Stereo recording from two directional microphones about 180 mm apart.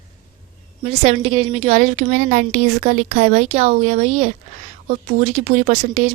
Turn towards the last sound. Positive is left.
turn(degrees=-40)  # may be behind; listen again after turning